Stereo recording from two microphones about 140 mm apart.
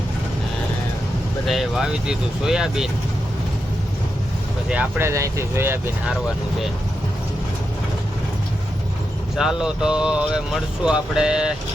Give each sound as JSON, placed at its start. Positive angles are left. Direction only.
{"t": 1.5, "sound": "speech", "side_deg": 0}
{"t": 4.7, "sound": "speech", "side_deg": -15}
{"t": 9.4, "sound": "speech", "side_deg": -5}